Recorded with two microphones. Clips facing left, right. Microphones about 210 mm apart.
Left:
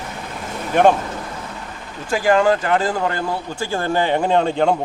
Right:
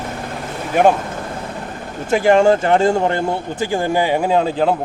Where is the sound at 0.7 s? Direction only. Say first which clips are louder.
Even; 5° right (ahead or behind).